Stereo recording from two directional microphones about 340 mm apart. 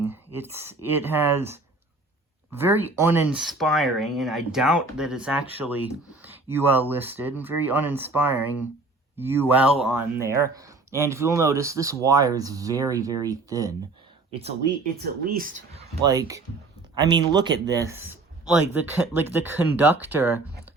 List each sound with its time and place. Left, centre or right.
0.0 s speech: centre
15.3 s speech: right; by 20.4 s centre